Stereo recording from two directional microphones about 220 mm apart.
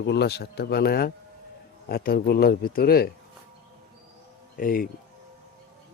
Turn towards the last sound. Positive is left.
turn(degrees=40)  # may be behind; listen again after turning